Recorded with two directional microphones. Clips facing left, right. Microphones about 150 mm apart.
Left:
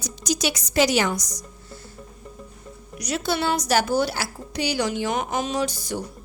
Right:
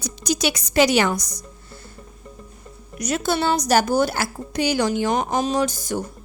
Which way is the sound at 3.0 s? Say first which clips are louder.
Right 3 dB; 50° right (ahead or behind).